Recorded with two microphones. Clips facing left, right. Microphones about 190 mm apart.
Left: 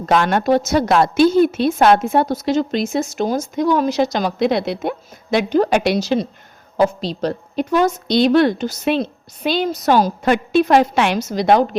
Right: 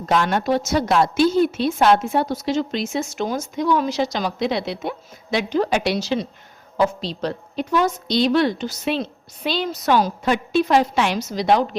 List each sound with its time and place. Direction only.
0.0 s a woman's voice: 60° left (ahead or behind); by 10.1 s 40° left (ahead or behind)
10.2 s a woman's voice: 60° left (ahead or behind)